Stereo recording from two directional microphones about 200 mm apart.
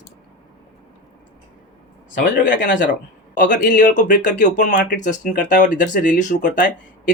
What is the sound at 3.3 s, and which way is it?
Speech, 40° left (ahead or behind).